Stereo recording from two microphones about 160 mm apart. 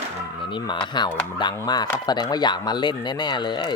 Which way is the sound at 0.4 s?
30° left (ahead or behind).